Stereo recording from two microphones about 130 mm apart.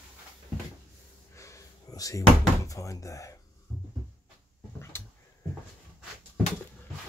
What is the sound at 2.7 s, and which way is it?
Speech, 25° left (ahead or behind).